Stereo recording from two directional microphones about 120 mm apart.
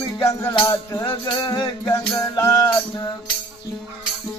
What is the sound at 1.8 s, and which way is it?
Music, 25° left (ahead or behind).